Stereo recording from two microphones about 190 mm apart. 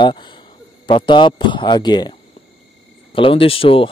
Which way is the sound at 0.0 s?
25° left (ahead or behind).